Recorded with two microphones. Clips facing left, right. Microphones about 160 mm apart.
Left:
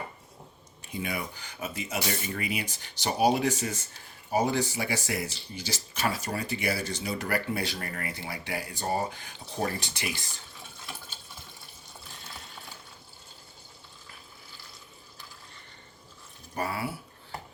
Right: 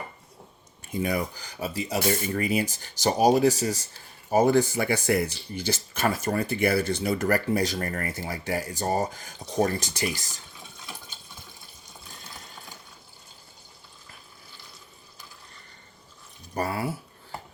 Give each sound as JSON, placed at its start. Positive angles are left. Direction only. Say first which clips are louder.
{"t": 0.9, "sound": "speech", "louder": "right 7 dB", "side_deg": -40}
{"t": 4.3, "sound": "speech", "louder": "right 6 dB", "side_deg": -50}
{"t": 16.6, "sound": "a sound", "louder": "right 3 dB", "side_deg": -40}